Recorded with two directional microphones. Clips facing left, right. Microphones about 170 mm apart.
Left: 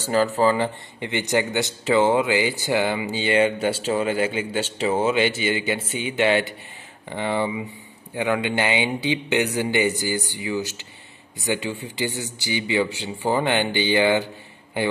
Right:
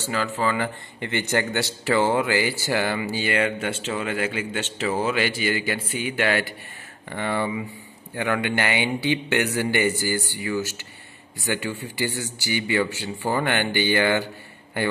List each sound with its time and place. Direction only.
0.0 s speech: 40° left (ahead or behind)
0.6 s speech: 15° left (ahead or behind)